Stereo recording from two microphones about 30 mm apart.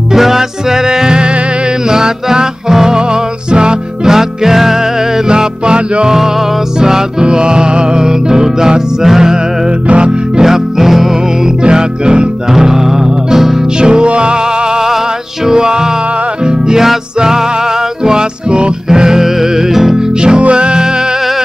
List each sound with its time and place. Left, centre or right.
0.1 s music: centre
4.0 s music: centre
5.3 s music: right
9.0 s music: centre
9.8 s music: right
10.4 s music: centre
11.6 s music: right
12.5 s music: centre
13.7 s music: right
15.5 s music: right
18.0 s music: right
18.9 s music: centre
20.2 s music: right